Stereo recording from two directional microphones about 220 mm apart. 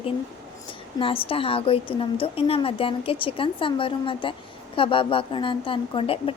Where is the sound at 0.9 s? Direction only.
25° left (ahead or behind).